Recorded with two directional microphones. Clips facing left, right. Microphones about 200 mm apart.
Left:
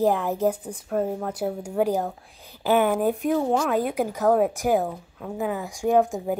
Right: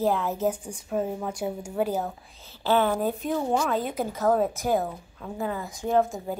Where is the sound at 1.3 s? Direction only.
5° left (ahead or behind).